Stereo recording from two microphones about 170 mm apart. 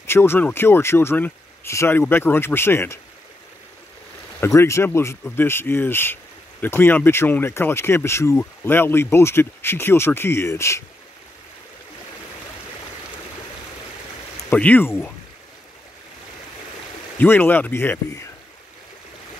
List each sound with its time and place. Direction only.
0.0 s speech: 15° left (ahead or behind)
4.4 s speech: 15° left (ahead or behind)
14.5 s speech: 10° left (ahead or behind)
17.2 s speech: 10° left (ahead or behind)